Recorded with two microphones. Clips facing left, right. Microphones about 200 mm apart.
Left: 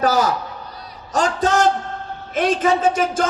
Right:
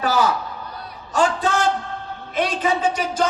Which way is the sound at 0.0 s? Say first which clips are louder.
Left 2 dB; 40° left (ahead or behind).